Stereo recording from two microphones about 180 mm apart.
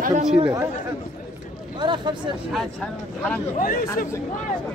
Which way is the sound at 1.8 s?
25° right (ahead or behind).